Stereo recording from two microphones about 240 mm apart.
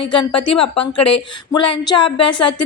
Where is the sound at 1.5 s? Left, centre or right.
Centre.